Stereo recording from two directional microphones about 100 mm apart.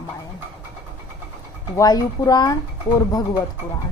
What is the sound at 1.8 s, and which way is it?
Speech, 35° left (ahead or behind).